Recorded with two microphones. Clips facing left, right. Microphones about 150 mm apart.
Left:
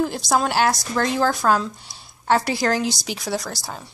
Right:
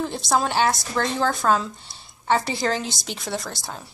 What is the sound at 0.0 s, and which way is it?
A woman's voice, centre (ahead or behind).